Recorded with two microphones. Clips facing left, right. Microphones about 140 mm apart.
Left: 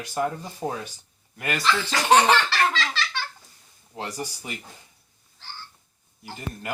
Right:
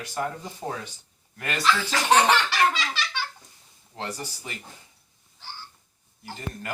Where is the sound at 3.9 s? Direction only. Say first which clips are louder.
Left 2 dB; 10° left (ahead or behind).